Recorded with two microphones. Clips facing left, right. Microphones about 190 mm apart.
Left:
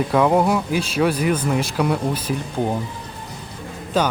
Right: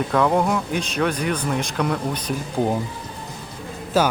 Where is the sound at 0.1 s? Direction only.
10° left (ahead or behind).